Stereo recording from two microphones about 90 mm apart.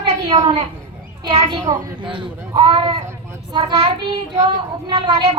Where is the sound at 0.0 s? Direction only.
65° right (ahead or behind).